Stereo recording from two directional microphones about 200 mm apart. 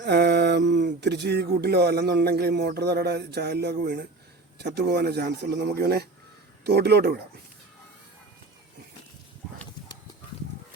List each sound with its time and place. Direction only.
0.0 s speech: 55° right (ahead or behind)